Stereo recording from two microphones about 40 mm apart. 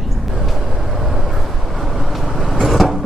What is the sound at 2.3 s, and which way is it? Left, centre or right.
Vehicle, centre.